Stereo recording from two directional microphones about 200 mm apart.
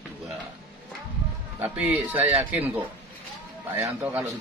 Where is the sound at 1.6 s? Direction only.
10° right (ahead or behind).